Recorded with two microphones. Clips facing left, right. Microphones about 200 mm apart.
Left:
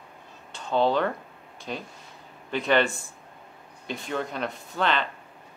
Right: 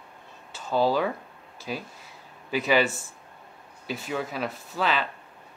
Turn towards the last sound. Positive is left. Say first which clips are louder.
# left 1 dB
turn(degrees=-5)  # may be behind; listen again after turning